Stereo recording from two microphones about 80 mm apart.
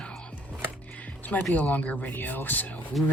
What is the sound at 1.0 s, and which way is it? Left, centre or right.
Music, centre.